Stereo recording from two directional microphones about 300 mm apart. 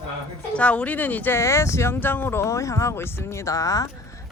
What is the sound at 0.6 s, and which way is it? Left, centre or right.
Speech, centre.